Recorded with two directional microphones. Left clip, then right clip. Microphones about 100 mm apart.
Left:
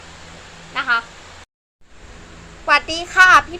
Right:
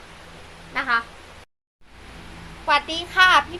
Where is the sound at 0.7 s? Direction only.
15° right (ahead or behind).